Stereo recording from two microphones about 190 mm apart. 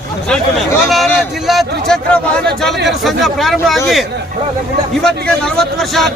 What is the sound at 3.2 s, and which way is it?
Speech, centre (ahead or behind).